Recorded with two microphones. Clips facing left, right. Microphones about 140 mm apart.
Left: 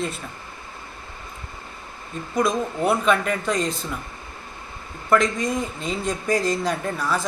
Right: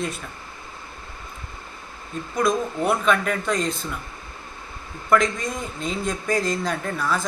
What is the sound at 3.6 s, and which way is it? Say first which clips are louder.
Speech: left 1 dB; 35° left (ahead or behind).